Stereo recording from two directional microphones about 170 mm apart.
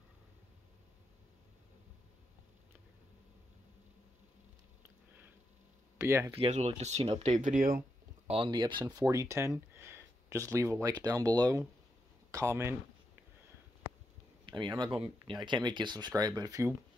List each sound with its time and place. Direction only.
5.9 s speech: 15° right (ahead or behind)
6.3 s speech: 35° right (ahead or behind); by 7.8 s 55° right (ahead or behind)
8.3 s speech: 30° right (ahead or behind)
14.4 s speech: 25° right (ahead or behind)